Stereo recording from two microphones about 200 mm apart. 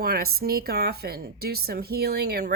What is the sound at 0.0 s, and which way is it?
Speech, 50° right (ahead or behind).